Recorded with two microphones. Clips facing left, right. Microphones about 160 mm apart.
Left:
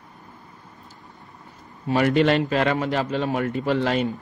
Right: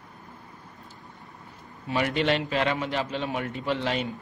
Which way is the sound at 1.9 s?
45° left (ahead or behind).